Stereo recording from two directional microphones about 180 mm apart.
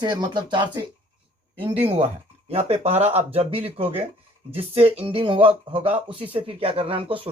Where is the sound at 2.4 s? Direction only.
35° right (ahead or behind).